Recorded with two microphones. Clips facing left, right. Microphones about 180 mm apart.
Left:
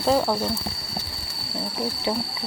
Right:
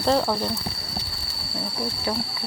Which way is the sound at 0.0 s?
5° left (ahead or behind).